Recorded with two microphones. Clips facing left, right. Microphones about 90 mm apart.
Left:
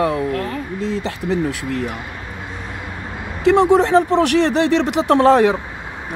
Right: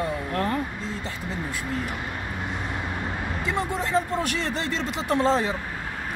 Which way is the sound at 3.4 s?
85° left.